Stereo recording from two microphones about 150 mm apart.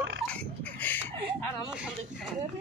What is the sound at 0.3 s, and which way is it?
Burping, 10° left (ahead or behind).